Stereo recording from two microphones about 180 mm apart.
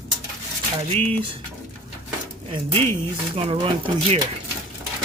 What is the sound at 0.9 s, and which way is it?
Speech, 35° right (ahead or behind).